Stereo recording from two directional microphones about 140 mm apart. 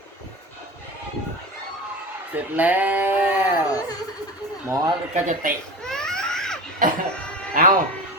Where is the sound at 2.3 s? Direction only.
10° right (ahead or behind).